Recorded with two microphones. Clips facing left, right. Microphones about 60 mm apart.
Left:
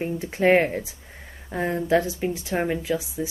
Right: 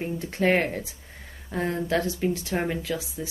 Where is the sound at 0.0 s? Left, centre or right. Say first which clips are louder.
Left 3 dB; centre.